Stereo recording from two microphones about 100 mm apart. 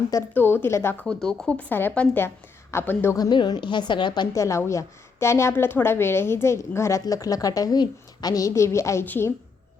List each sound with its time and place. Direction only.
0.3 s a woman's voice: 20° left (ahead or behind)
1.0 s a woman's voice: 5° left (ahead or behind); by 3.2 s 20° left (ahead or behind)
3.2 s a woman's voice: 45° left (ahead or behind)
4.4 s a woman's voice: 30° left (ahead or behind)